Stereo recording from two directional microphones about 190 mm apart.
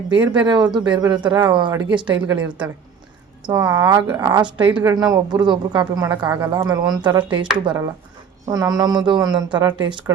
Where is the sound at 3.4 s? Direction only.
20° right (ahead or behind).